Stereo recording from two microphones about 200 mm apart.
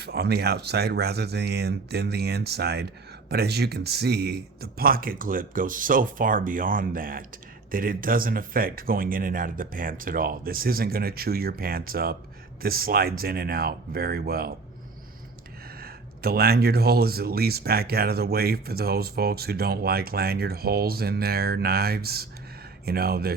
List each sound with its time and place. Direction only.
0.0 s speech: 55° right (ahead or behind)
15.8 s speech: 50° right (ahead or behind)